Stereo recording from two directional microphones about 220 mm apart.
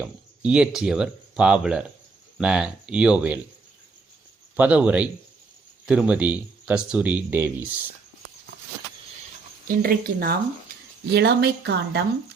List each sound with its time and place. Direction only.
0.0 s speech: 5° right (ahead or behind)
4.5 s speech: 5° right (ahead or behind)
9.6 s a woman's voice: 40° right (ahead or behind)